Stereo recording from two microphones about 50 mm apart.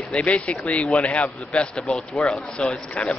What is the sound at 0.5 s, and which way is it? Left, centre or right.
A man's voice, left.